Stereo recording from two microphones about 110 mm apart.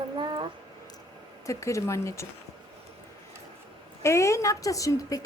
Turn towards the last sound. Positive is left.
turn(degrees=30)  # may be behind; listen again after turning